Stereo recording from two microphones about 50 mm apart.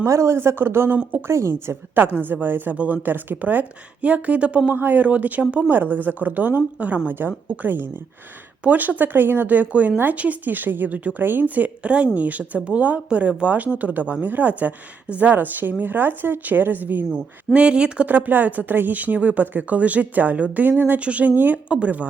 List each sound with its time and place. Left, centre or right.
0.0 s a man's voice: right
0.3 s speech: right
1.3 s a woman's voice: right
2.0 s speech: right
2.7 s a woman's voice: right
4.7 s speech: right
7.1 s speech: right
17.1 s a woman's voice: right
18.0 s speech: right
21.0 s speech: right
21.7 s a woman's voice: right